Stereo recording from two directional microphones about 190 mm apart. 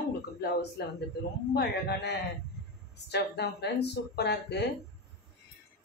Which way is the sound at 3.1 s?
60° left (ahead or behind).